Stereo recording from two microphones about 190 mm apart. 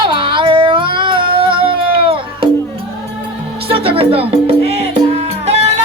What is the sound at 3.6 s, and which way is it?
Music, 30° right (ahead or behind).